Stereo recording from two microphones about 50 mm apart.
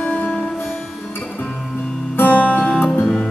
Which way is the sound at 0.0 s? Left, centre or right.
Left.